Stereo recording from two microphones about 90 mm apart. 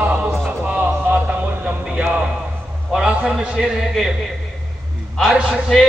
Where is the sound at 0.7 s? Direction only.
20° right (ahead or behind).